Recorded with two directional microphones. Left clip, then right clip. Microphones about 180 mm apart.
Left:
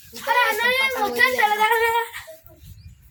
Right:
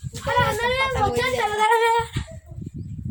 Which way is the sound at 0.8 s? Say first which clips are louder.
Left 1 dB; 45° right (ahead or behind).